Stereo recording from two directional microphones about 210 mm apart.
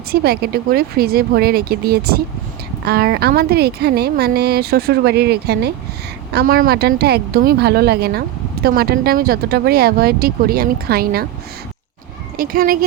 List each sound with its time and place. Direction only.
0.1 s speech: 45° right (ahead or behind)
12.4 s speech: 45° right (ahead or behind)